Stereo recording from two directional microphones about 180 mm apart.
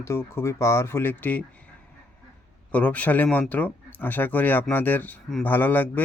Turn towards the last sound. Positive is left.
turn(degrees=10)  # may be behind; listen again after turning